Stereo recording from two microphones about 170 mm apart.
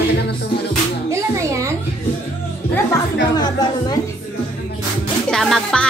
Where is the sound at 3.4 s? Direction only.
25° left (ahead or behind).